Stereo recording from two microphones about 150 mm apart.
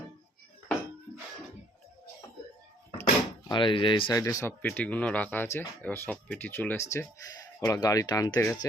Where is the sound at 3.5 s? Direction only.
35° left (ahead or behind).